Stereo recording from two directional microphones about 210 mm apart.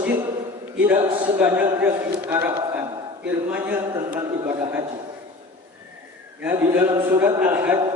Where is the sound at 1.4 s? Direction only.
10° right (ahead or behind).